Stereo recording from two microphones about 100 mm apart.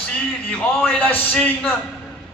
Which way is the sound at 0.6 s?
5° left (ahead or behind).